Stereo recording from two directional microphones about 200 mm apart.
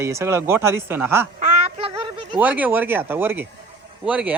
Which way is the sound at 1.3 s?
30° right (ahead or behind).